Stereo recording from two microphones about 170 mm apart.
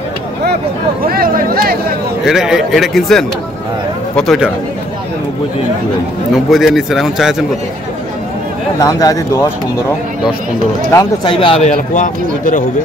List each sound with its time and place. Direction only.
1.0 s speech: 60° right (ahead or behind)
2.2 s speech: 5° right (ahead or behind)
6.3 s speech: centre (ahead or behind)
8.8 s speech: 20° left (ahead or behind)
10.9 s speech: 20° left (ahead or behind)
11.3 s speech: 35° left (ahead or behind)
11.7 s a man's voice: 50° left (ahead or behind)